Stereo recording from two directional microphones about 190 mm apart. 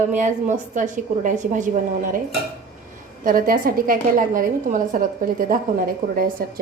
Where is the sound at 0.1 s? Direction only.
40° right (ahead or behind).